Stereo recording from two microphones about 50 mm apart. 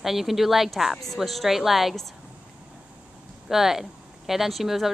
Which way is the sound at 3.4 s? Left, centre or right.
Centre.